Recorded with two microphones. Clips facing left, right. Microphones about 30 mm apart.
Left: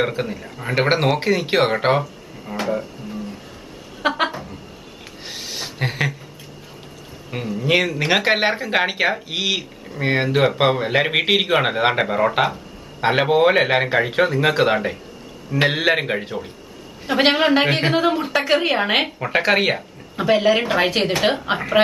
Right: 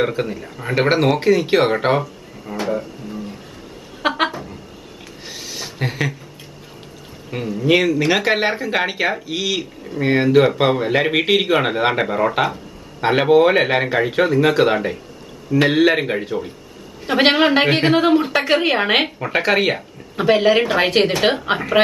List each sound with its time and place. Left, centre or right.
0.0 s speech: centre
2.6 s a sound: centre
5.2 s a sound: centre
7.2 s speech: centre
9.6 s speech: centre
17.0 s a woman's voice: centre
19.1 s speech: centre
20.2 s a woman's voice: centre